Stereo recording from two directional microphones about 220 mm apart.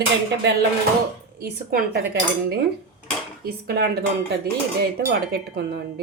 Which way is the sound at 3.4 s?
45° right (ahead or behind).